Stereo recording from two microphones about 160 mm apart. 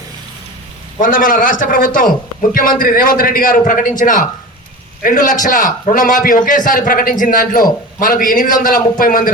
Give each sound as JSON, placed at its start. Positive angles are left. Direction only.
{"t": 0.9, "sound": "a man's voice", "side_deg": 55}